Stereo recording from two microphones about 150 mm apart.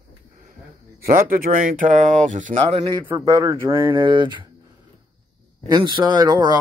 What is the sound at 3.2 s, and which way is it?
Speech, 25° right (ahead or behind).